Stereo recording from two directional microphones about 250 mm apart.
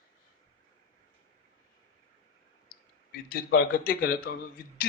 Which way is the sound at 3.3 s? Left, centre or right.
Left.